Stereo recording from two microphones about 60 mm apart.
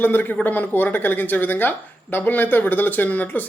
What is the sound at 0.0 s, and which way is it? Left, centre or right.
Speech, left.